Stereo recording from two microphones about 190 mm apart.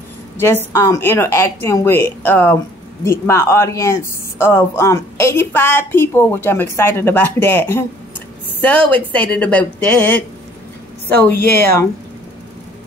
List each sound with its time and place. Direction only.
0.4 s speech: 10° left (ahead or behind)
11.5 s speech: 15° left (ahead or behind)